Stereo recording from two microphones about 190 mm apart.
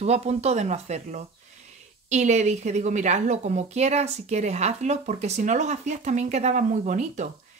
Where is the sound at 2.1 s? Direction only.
35° right (ahead or behind).